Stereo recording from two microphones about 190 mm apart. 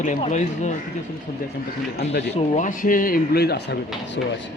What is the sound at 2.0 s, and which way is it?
Speech, 60° left (ahead or behind).